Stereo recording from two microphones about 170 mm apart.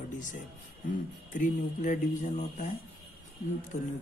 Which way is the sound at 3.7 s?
45° left (ahead or behind).